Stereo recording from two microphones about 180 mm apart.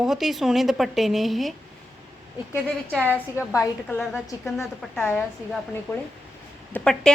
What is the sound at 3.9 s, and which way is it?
A woman's voice, centre (ahead or behind).